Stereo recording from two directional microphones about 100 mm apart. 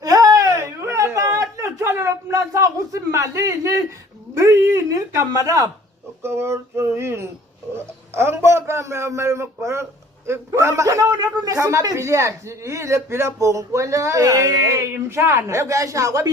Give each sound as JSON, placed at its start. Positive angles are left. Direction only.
{"t": 0.0, "sound": "a sound", "side_deg": -35}
{"t": 4.4, "sound": "a man's voice", "side_deg": -30}
{"t": 6.2, "sound": "a man's voice", "side_deg": -25}